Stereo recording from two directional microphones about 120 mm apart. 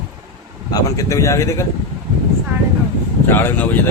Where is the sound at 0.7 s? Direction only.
30° left (ahead or behind).